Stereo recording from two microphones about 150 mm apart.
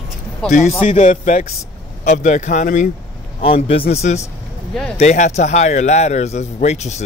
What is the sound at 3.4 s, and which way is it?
A man's voice, 40° left (ahead or behind).